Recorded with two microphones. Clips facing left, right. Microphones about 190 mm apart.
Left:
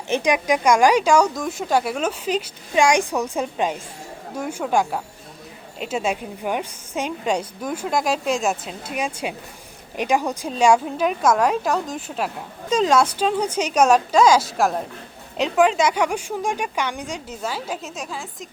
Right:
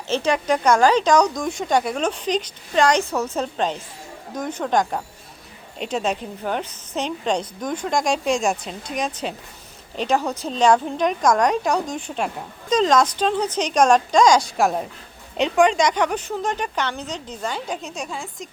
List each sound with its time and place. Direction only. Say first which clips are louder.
0.1 s a woman's voice: left 1 dB; 15° left (ahead or behind)